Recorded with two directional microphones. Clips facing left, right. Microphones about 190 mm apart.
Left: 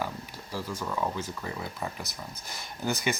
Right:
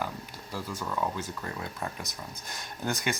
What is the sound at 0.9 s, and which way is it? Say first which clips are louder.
Speech: even; 5° left (ahead or behind).